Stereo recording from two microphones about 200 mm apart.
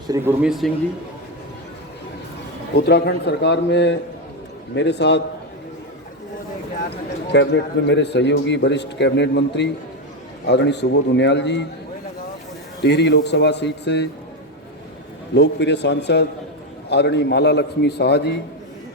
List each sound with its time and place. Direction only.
0.1 s speech: 10° right (ahead or behind)
2.7 s a man's voice: 55° left (ahead or behind)
7.3 s a man's voice: 60° left (ahead or behind)
12.8 s a man's voice: 60° left (ahead or behind)
15.4 s a man's voice: 60° left (ahead or behind)